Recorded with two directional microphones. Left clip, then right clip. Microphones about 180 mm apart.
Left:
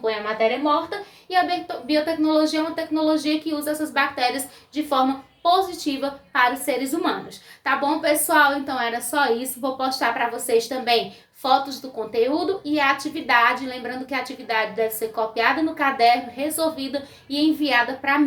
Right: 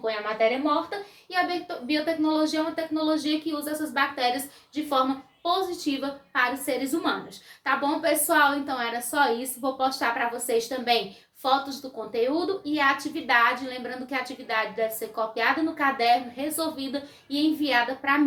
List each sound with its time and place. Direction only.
0.0 s a child's voice: 20° left (ahead or behind)